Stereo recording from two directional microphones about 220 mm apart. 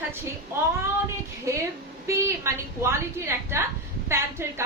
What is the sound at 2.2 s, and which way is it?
A woman's voice, 10° right (ahead or behind).